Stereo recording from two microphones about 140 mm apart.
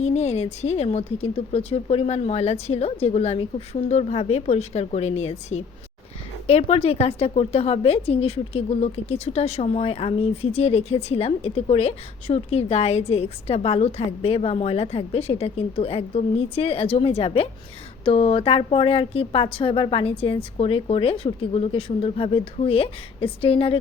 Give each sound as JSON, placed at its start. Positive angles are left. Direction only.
{"t": 0.0, "sound": "a woman's voice", "side_deg": 50}